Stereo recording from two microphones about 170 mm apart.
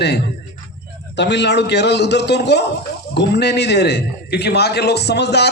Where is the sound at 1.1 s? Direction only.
90° left.